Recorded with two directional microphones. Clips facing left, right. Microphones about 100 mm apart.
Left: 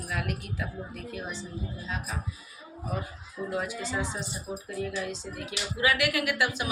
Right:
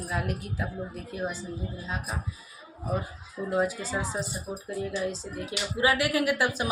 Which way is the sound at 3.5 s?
35° right (ahead or behind).